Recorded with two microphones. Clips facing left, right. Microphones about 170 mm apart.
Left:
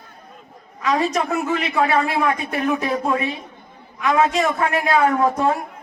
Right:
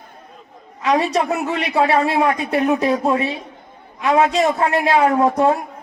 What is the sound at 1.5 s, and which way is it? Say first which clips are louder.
Speech: right 2 dB; 30° right (ahead or behind).